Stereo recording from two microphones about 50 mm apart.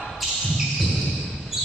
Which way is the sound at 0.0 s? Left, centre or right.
Centre.